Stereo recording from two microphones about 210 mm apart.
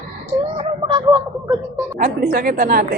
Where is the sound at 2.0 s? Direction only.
45° right (ahead or behind).